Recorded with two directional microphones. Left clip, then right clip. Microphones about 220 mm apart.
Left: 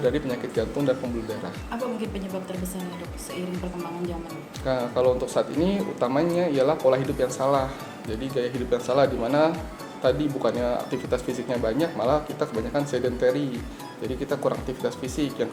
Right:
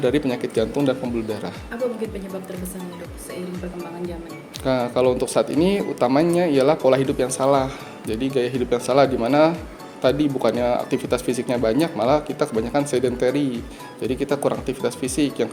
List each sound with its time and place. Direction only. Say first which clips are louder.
0.0 s speech: right 4 dB; 50° right (ahead or behind)
4.6 s speech: right 3 dB; 50° right (ahead or behind)